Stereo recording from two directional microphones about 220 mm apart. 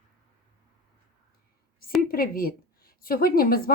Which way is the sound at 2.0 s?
40° left (ahead or behind).